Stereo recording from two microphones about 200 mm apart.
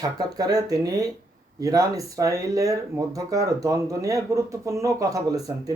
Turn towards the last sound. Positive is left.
turn(degrees=-15)  # may be behind; listen again after turning